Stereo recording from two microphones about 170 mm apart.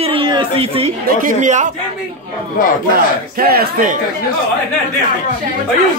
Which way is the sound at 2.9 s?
60° right (ahead or behind).